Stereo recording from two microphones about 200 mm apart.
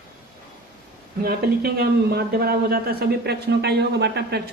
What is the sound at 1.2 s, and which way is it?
A man's voice, 50° right (ahead or behind).